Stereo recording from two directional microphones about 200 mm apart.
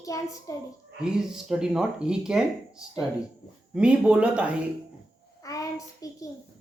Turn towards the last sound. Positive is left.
turn(degrees=15)  # may be behind; listen again after turning